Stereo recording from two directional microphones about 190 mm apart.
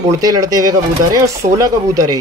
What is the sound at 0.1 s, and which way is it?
Speech, 20° right (ahead or behind).